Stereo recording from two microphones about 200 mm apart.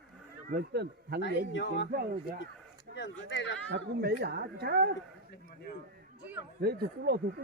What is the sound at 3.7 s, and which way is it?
Speech, 55° right (ahead or behind).